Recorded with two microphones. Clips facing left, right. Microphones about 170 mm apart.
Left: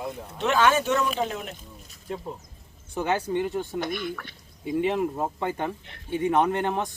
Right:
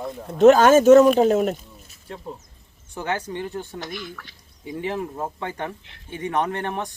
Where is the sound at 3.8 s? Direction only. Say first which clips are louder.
Left 4 dB; 55° left (ahead or behind).